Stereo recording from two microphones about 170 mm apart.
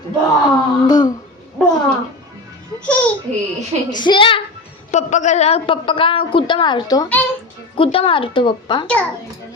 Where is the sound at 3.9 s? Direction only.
25° left (ahead or behind).